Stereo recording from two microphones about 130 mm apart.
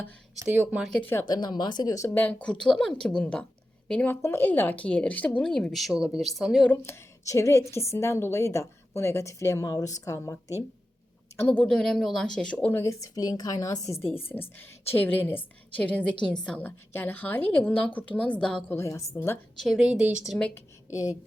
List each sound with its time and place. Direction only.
0.4 s speech: 15° right (ahead or behind)
1.2 s speech: 35° left (ahead or behind)
2.2 s a woman's voice: 10° left (ahead or behind)
6.7 s a woman's voice: 20° left (ahead or behind)
11.6 s a woman's voice: 5° left (ahead or behind)
12.7 s a woman's voice: 25° left (ahead or behind); by 18.8 s 5° left (ahead or behind)
18.8 s a woman's voice: 20° left (ahead or behind)
19.5 s a woman's voice: centre (ahead or behind)
20.9 s a woman's voice: 25° left (ahead or behind)